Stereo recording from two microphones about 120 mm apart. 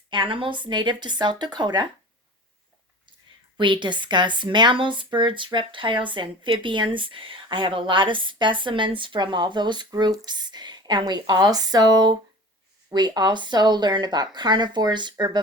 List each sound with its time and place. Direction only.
0.1 s speech: 45° right (ahead or behind)
3.6 s speech: 40° right (ahead or behind)